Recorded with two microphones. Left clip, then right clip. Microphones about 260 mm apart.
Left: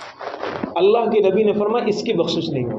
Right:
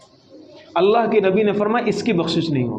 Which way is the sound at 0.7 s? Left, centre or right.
Right.